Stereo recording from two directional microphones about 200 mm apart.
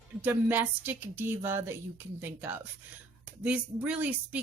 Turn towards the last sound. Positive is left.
turn(degrees=-5)  # may be behind; listen again after turning